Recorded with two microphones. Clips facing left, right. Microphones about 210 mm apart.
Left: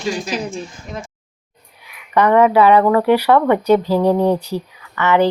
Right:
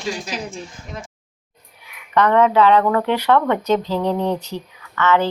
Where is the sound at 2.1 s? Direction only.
10° left (ahead or behind).